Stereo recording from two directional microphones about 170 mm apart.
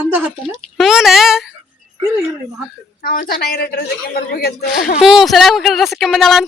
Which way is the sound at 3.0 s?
60° left (ahead or behind).